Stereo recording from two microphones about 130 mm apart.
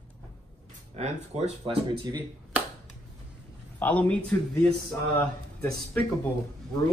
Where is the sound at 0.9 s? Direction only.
55° right (ahead or behind).